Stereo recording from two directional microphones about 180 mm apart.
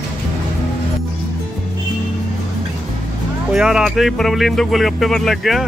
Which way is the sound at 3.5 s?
5° right (ahead or behind).